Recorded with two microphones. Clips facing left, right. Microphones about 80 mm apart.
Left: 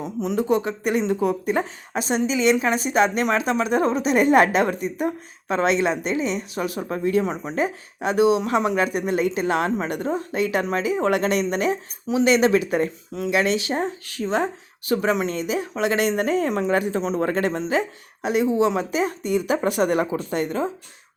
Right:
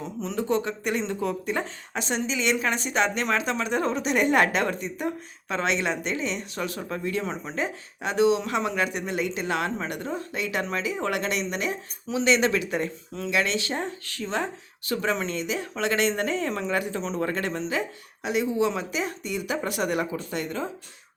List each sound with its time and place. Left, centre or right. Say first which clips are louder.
0.0 s speech: left 6 dB; centre
5.5 s speech: left 6 dB; left
5.9 s speech: left 5 dB; centre
8.4 s speech: left 5 dB; left
12.0 s speech: left 5 dB; centre